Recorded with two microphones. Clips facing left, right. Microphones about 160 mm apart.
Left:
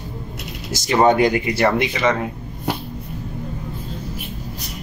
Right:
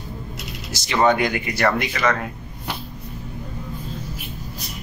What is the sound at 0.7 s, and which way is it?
Speech, 45° left (ahead or behind).